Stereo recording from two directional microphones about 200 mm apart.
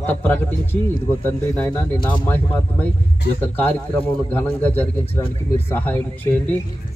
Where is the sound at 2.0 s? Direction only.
5° left (ahead or behind).